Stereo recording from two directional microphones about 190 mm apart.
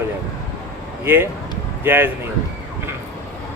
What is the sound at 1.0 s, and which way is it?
Speech, 10° right (ahead or behind).